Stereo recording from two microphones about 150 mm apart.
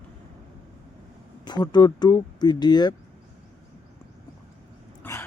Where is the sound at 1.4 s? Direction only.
30° left (ahead or behind).